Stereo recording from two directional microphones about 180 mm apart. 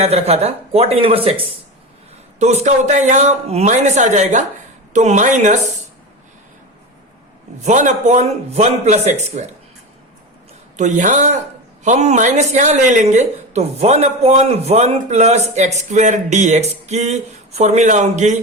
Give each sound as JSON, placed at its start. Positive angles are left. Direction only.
{"t": 0.0, "sound": "speech", "side_deg": -35}
{"t": 2.4, "sound": "speech", "side_deg": -40}
{"t": 7.6, "sound": "speech", "side_deg": -40}
{"t": 10.8, "sound": "speech", "side_deg": -45}